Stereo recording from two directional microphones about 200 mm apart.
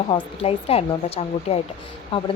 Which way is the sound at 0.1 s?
25° left (ahead or behind).